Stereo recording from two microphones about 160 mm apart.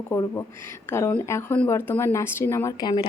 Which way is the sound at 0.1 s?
15° left (ahead or behind).